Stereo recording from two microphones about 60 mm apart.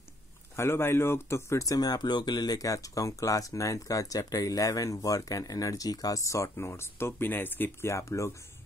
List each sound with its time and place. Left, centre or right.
0.6 s speech: left
1.6 s speech: left
7.9 s speech: left